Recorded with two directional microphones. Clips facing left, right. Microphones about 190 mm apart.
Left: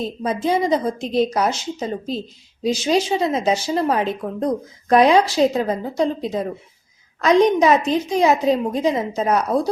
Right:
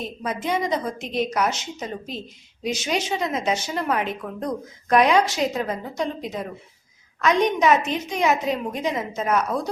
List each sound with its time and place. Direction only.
0.0 s speech: 30° left (ahead or behind)